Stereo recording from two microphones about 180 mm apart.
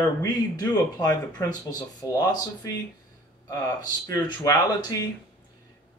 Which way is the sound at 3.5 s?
20° left (ahead or behind).